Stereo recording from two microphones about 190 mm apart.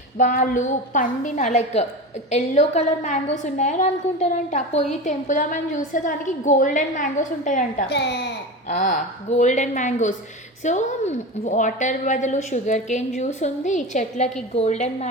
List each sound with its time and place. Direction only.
0.2 s a woman's voice: 45° left (ahead or behind)
7.9 s speech: 60° left (ahead or behind)
8.6 s a woman's voice: 40° left (ahead or behind)